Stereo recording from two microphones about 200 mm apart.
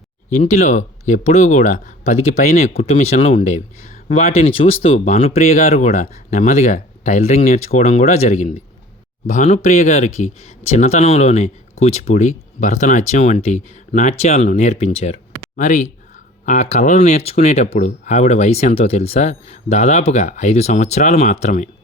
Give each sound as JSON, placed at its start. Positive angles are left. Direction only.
{"t": 0.3, "sound": "speech", "side_deg": 35}